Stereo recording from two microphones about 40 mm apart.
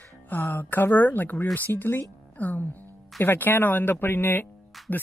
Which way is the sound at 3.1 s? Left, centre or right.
Left.